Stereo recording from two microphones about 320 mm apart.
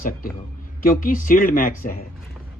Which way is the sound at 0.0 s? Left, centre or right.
Left.